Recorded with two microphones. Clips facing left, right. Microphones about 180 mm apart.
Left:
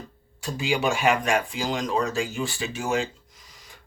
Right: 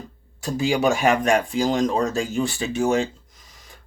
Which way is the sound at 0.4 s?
40° right (ahead or behind).